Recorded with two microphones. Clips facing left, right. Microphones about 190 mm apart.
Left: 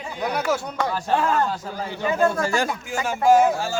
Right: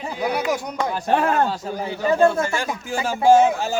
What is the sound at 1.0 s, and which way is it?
Speech, 60° right (ahead or behind).